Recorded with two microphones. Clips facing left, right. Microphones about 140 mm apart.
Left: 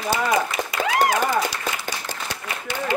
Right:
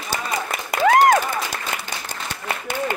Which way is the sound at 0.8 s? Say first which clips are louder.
Right 7 dB; 50° right (ahead or behind).